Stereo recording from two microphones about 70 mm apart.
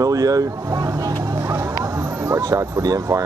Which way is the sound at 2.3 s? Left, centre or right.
Right.